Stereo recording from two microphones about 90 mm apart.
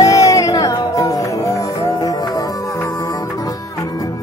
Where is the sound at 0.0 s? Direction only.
35° left (ahead or behind).